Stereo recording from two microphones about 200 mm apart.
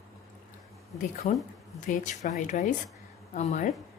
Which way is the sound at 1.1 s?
40° left (ahead or behind).